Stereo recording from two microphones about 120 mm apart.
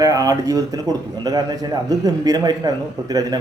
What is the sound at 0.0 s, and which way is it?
A man's voice, 30° right (ahead or behind).